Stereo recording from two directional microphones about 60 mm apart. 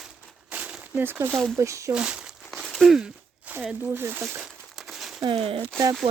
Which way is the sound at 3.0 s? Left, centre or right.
Centre.